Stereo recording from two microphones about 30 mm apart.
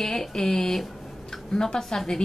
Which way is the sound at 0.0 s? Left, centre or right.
Centre.